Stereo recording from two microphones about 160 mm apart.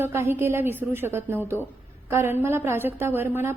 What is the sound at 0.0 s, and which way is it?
A woman's voice, 15° right (ahead or behind).